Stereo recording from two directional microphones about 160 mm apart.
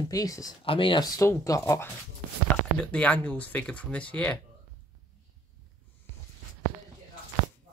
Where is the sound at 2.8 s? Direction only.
5° left (ahead or behind).